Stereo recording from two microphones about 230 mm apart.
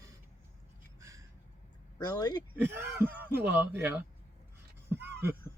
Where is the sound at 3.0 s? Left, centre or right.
Centre.